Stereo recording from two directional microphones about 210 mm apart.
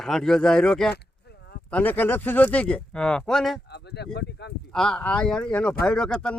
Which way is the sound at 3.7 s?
50° left (ahead or behind).